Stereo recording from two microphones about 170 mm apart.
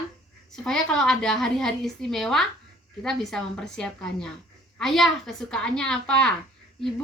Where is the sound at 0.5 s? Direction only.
5° left (ahead or behind).